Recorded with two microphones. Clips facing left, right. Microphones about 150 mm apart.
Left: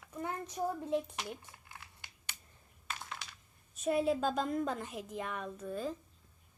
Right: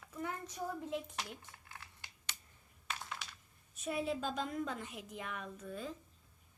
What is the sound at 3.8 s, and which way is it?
Speech, 40° left (ahead or behind).